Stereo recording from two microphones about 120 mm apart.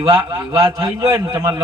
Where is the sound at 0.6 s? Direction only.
40° right (ahead or behind).